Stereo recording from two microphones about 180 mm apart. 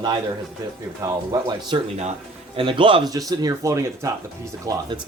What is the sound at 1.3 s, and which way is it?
Speech, 25° right (ahead or behind).